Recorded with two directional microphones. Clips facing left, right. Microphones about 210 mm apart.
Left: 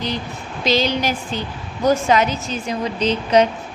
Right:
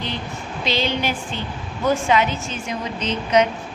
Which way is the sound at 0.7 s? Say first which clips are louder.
Left 4 dB; 40° left (ahead or behind).